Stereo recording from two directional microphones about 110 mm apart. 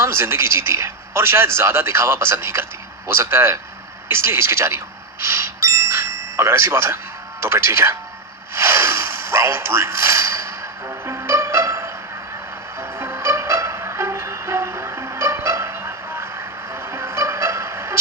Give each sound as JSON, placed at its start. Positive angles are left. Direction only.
{"t": 0.0, "sound": "a man's voice", "side_deg": -25}
{"t": 5.2, "sound": "ding", "side_deg": -25}
{"t": 7.4, "sound": "a man's voice", "side_deg": -25}
{"t": 8.5, "sound": "a sound", "side_deg": -25}
{"t": 12.8, "sound": "music", "side_deg": -20}